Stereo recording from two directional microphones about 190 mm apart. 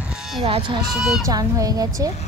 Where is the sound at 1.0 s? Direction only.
Centre (ahead or behind).